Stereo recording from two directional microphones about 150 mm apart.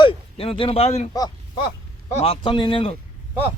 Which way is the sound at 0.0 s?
35° left (ahead or behind).